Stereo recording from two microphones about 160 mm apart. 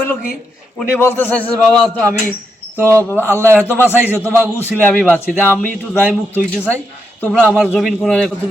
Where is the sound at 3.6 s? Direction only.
10° left (ahead or behind).